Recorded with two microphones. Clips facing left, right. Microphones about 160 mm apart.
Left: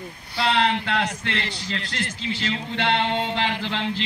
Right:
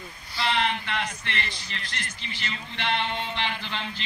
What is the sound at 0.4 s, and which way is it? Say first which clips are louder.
A man's voice: left 5 dB; 80° left.